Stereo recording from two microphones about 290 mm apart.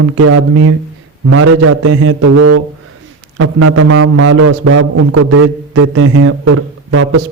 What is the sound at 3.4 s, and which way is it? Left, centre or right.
A man's voice, right.